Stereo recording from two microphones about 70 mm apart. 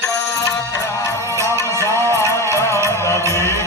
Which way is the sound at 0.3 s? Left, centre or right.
Left.